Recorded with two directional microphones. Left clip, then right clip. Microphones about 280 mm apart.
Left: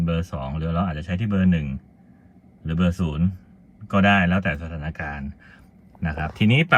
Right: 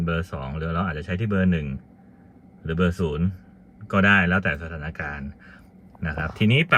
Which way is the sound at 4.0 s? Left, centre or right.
Centre.